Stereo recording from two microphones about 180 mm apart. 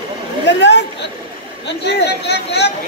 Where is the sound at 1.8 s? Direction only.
70° left (ahead or behind).